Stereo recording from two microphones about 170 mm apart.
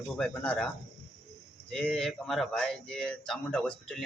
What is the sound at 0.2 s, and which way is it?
Speech, 5° left (ahead or behind).